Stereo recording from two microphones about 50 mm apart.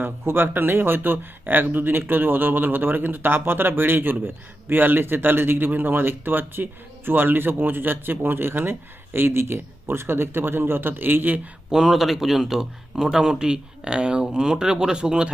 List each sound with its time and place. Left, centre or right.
0.0 s speech: right
11.7 s speech: centre